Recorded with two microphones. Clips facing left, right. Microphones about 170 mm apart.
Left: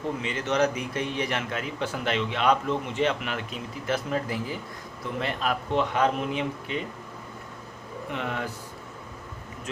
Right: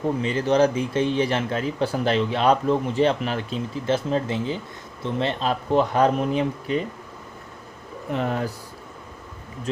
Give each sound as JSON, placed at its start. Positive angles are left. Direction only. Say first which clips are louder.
{"t": 0.2, "sound": "speech", "louder": "right 6 dB", "side_deg": -35}
{"t": 8.1, "sound": "speech", "louder": "right 7 dB", "side_deg": -40}